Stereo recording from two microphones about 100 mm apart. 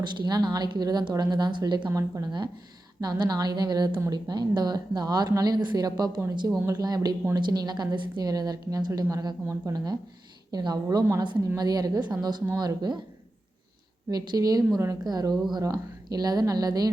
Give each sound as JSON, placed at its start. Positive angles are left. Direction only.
{"t": 0.0, "sound": "a woman's voice", "side_deg": -50}
{"t": 1.9, "sound": "a woman's voice", "side_deg": -30}
{"t": 3.0, "sound": "a woman's voice", "side_deg": -40}
{"t": 14.1, "sound": "a woman's voice", "side_deg": -40}